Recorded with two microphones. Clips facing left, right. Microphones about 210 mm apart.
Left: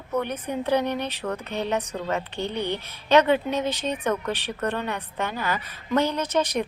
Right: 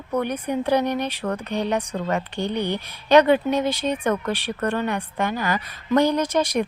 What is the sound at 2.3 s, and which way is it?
A woman's voice, 15° right (ahead or behind).